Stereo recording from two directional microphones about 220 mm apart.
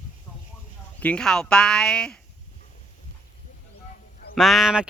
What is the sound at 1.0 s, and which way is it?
Speech, 5° left (ahead or behind).